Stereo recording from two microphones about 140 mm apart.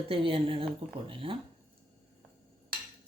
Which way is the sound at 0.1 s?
40° right (ahead or behind).